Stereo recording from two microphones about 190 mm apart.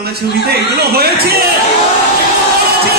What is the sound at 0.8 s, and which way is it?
Speech, 55° right (ahead or behind).